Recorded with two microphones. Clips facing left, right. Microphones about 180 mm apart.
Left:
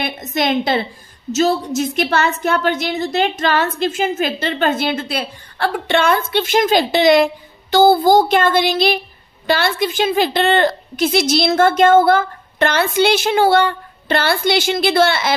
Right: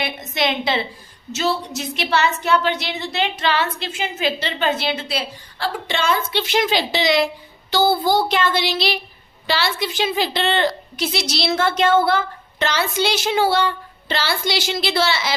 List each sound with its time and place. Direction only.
0.0 s a woman's voice: 45° left (ahead or behind)